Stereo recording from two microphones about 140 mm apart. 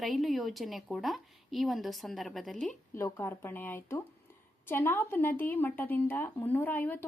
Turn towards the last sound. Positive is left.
turn(degrees=15)  # may be behind; listen again after turning